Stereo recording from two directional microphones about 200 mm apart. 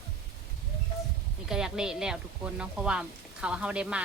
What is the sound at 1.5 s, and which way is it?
Speech, 5° right (ahead or behind).